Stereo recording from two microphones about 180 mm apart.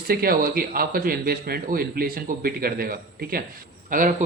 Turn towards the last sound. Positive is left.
turn(degrees=-50)  # may be behind; listen again after turning